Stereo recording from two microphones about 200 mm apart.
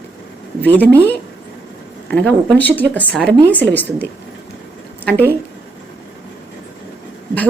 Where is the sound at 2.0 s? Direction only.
5° left (ahead or behind).